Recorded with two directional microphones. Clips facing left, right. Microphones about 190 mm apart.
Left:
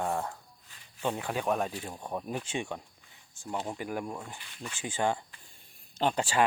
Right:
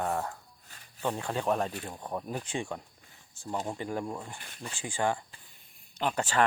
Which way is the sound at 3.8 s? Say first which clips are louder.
Right 1 dB; 10° left (ahead or behind).